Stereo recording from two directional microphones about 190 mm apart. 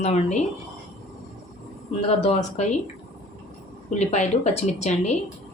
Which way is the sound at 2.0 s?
35° left (ahead or behind).